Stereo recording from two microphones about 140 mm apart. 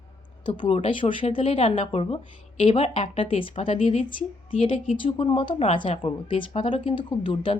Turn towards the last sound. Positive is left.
turn(degrees=35)  # may be behind; listen again after turning